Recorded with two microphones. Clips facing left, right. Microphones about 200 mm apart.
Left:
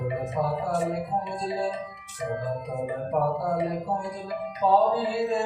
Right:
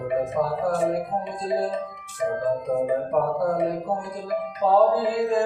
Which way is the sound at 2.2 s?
55° right (ahead or behind).